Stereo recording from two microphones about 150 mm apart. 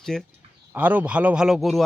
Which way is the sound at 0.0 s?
5° left (ahead or behind).